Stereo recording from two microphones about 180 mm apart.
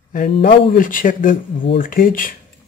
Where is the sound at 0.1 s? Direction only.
55° left (ahead or behind).